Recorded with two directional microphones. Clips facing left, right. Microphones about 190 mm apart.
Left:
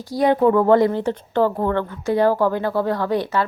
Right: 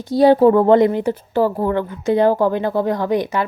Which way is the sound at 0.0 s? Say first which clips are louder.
Right 5 dB; 25° right (ahead or behind).